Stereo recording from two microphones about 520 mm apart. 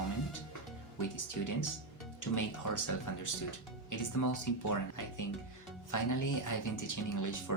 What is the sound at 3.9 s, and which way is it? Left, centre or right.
Speech, left.